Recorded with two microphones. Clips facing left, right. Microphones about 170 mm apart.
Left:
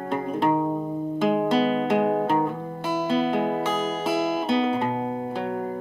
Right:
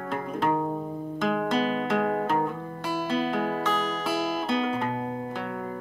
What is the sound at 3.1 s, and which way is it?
Music, 25° left (ahead or behind).